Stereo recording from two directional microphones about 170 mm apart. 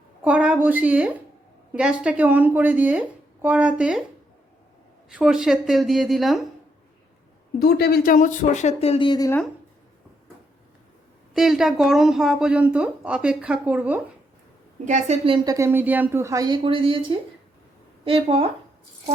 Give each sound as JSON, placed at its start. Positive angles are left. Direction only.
{"t": 0.3, "sound": "speech", "side_deg": -10}
{"t": 5.0, "sound": "a woman's voice", "side_deg": -5}
{"t": 7.6, "sound": "speech", "side_deg": 70}
{"t": 11.3, "sound": "a woman's voice", "side_deg": 0}
{"t": 14.8, "sound": "a woman's voice", "side_deg": -45}
{"t": 15.4, "sound": "speech", "side_deg": -15}